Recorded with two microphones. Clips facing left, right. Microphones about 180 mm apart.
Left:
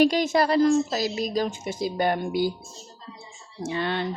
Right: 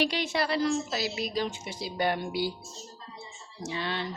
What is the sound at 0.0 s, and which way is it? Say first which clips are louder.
A woman's voice: left 8 dB; 45° left (ahead or behind).